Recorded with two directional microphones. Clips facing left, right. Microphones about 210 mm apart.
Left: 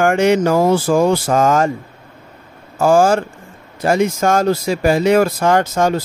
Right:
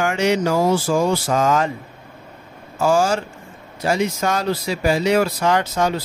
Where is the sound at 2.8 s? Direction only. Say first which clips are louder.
Left 5 dB; 50° left (ahead or behind).